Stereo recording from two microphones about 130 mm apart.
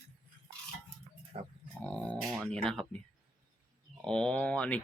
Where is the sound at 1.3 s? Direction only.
40° right (ahead or behind).